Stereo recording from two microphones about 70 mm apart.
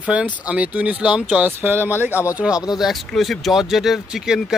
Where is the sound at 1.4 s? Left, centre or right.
Right.